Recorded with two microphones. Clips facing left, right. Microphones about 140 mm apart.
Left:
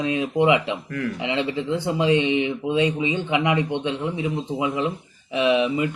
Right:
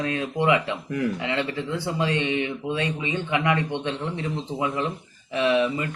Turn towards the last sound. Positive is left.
turn(degrees=15)  # may be behind; listen again after turning